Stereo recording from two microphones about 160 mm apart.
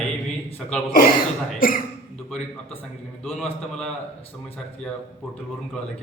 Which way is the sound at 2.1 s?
5° left (ahead or behind).